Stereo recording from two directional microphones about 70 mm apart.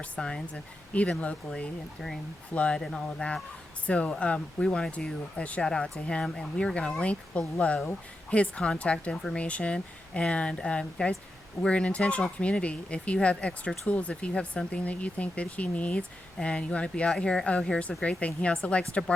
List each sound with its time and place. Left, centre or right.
0.0 s speech: centre